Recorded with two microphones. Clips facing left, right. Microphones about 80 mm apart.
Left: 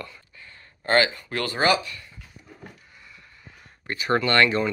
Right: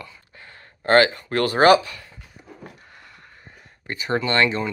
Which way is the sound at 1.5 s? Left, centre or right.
Right.